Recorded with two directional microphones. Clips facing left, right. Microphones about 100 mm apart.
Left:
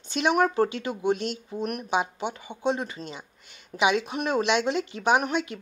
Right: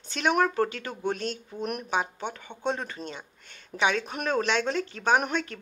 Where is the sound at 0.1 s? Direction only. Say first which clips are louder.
Left 2 dB; 15° left (ahead or behind).